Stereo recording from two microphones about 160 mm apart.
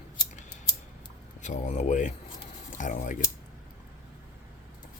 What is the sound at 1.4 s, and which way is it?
Speech, 50° left (ahead or behind).